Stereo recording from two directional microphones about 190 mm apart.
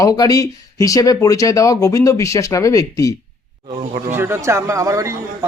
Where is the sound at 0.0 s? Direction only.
20° left (ahead or behind).